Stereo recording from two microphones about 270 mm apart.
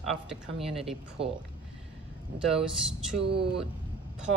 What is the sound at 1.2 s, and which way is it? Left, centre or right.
Speech, right.